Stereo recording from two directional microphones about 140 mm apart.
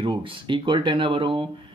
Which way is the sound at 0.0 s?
35° right (ahead or behind).